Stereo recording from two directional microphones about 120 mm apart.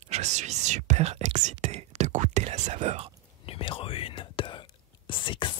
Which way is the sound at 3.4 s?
50° left (ahead or behind).